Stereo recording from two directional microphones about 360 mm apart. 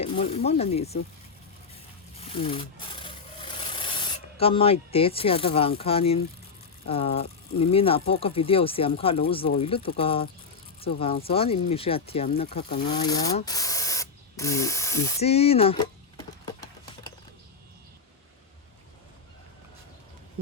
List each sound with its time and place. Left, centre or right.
0.0 s speech: centre
2.1 s wood: centre
6.8 s speech: centre